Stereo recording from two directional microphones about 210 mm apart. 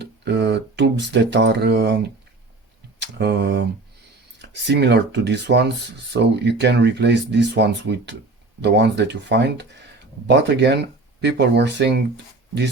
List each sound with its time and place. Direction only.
0.0 s speech: 55° right (ahead or behind)
3.0 s a sound: 50° right (ahead or behind)
4.4 s speech: 55° right (ahead or behind)